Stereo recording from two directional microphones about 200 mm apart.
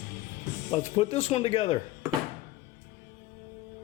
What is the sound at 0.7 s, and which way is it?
Speech, 30° left (ahead or behind).